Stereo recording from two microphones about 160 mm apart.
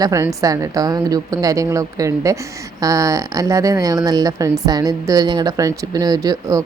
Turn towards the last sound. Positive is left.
turn(degrees=-20)  # may be behind; listen again after turning